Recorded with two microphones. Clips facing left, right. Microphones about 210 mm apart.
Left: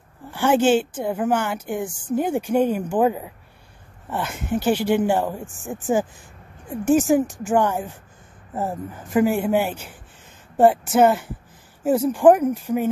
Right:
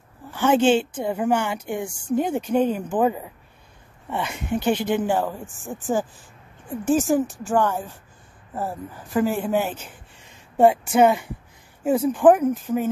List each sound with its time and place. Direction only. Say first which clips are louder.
0.3 s speech: even; 10° left (ahead or behind)